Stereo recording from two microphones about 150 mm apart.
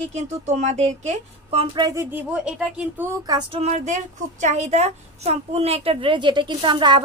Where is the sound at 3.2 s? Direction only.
30° right (ahead or behind).